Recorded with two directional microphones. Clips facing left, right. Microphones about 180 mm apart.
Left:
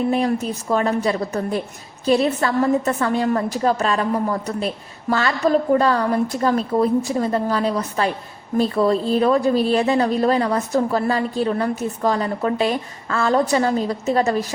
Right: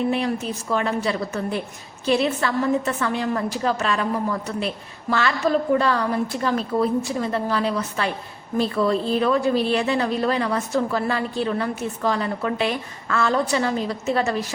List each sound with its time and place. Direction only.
0.1 s a woman's voice: 40° left (ahead or behind)
7.2 s a woman's voice: 40° left (ahead or behind)